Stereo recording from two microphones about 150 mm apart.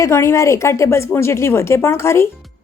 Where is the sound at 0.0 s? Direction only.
20° left (ahead or behind).